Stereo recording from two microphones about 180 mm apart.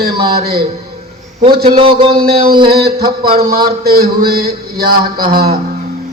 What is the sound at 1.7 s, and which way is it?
Speech, 30° right (ahead or behind).